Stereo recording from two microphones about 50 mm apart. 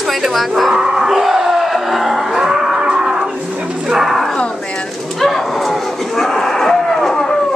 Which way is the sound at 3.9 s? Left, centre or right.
Centre.